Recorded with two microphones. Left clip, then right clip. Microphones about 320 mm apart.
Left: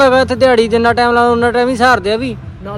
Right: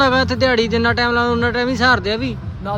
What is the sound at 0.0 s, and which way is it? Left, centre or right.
Speech, centre.